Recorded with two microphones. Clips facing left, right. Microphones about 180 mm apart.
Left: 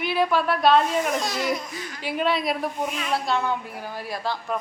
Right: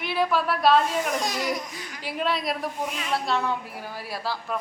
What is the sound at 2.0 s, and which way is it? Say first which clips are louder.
A woman's voice: left 3 dB; centre (ahead or behind).